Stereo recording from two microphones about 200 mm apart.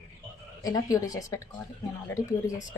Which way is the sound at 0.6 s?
15° left (ahead or behind).